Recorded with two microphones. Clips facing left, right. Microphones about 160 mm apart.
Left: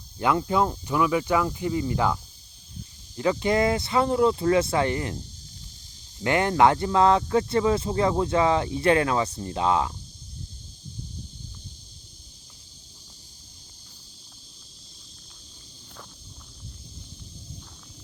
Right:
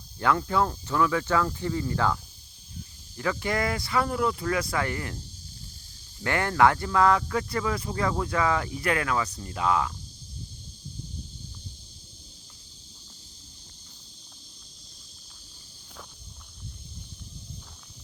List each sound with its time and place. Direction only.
0.2 s speech: 20° left (ahead or behind)
3.2 s speech: 20° left (ahead or behind)
6.2 s speech: 20° left (ahead or behind)